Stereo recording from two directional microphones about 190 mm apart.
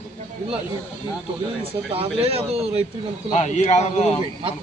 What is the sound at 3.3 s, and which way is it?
Speech, 40° left (ahead or behind).